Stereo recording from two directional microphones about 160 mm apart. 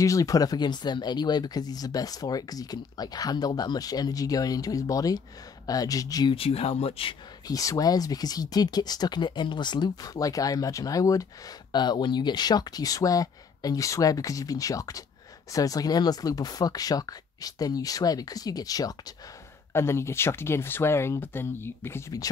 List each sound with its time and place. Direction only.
0.0 s speech: 20° left (ahead or behind)
6.3 s speech: 35° left (ahead or behind)
7.4 s speech: 20° left (ahead or behind)